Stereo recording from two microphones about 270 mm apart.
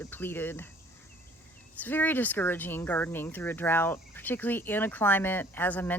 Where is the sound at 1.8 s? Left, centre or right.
Centre.